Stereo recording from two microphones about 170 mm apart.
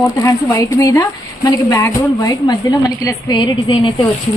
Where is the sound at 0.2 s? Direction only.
20° left (ahead or behind).